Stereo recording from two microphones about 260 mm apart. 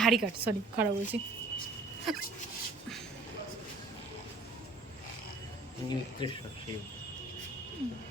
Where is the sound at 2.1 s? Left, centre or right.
Centre.